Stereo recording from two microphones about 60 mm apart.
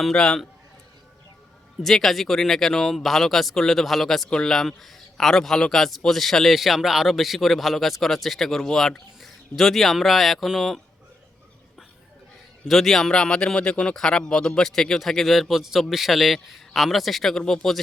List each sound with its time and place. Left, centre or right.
0.0 s speech: centre
1.8 s a man's voice: centre
12.6 s a man's voice: centre